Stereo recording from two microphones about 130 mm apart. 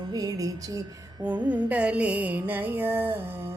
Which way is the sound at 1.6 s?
10° right (ahead or behind).